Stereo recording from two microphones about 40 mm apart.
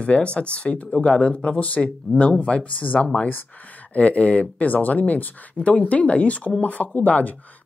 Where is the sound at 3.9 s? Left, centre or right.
Left.